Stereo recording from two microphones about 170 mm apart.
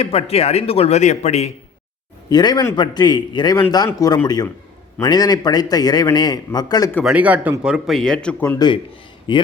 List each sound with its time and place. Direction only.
0.0 s speech: 35° left (ahead or behind)
2.3 s a man's voice: 25° left (ahead or behind)
7.0 s a man's voice: 5° right (ahead or behind); by 8.5 s 10° left (ahead or behind)
8.5 s a man's voice: 25° left (ahead or behind)